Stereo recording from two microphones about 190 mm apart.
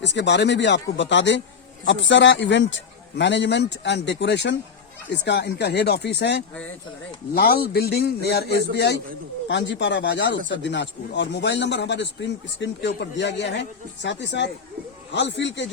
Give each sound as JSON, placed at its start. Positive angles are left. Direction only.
{"t": 0.0, "sound": "speech", "side_deg": 65}
{"t": 7.3, "sound": "speech", "side_deg": 55}
{"t": 9.5, "sound": "speech", "side_deg": 70}